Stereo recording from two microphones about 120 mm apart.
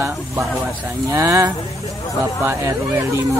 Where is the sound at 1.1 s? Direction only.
25° right (ahead or behind).